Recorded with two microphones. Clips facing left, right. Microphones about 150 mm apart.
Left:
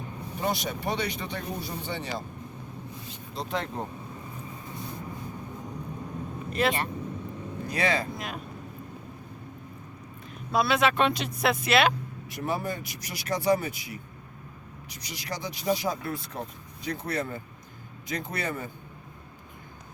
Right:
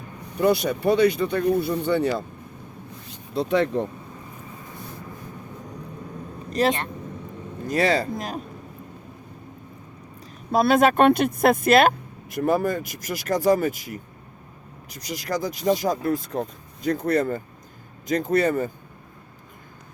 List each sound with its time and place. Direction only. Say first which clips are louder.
0.3 s speech: right 10 dB; 60° right (ahead or behind)
3.3 s speech: right 11 dB; 70° right (ahead or behind)
6.5 s speech: right 5 dB; 40° right (ahead or behind)
10.5 s speech: right 6 dB; 45° right (ahead or behind)